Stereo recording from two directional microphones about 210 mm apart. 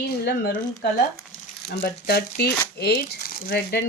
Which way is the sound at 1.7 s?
50° left (ahead or behind).